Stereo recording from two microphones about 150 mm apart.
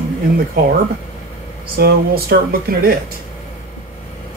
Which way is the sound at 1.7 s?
90° right.